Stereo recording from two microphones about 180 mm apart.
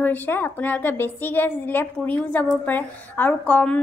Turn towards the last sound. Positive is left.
turn(degrees=5)  # may be behind; listen again after turning